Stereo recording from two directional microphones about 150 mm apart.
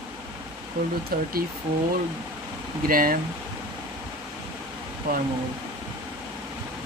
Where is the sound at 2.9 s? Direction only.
70° right (ahead or behind).